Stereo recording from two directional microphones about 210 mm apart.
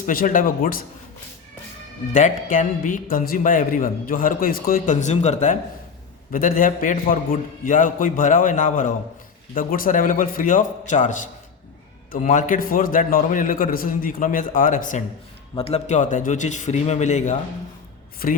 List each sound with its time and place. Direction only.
0.0 s a man's voice: 40° left (ahead or behind)
2.1 s a man's voice: 35° left (ahead or behind)